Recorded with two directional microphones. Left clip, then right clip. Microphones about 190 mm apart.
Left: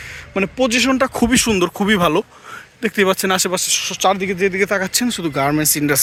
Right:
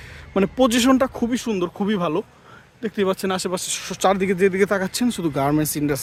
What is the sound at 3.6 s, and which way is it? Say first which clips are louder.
Speech: left 4 dB; 20° right (ahead or behind).